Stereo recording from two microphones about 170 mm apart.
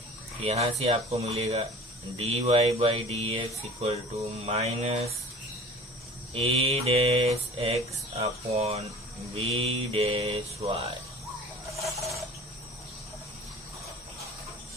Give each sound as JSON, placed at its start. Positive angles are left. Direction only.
{"t": 0.4, "sound": "speech", "side_deg": -35}
{"t": 6.3, "sound": "speech", "side_deg": -35}